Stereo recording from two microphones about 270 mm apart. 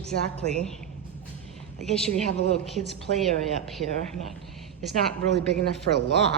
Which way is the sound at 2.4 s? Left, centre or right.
Left.